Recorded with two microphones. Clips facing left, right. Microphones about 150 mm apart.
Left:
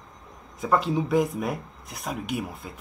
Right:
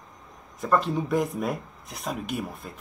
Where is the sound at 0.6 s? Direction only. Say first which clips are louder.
Left 1 dB; 10° left (ahead or behind).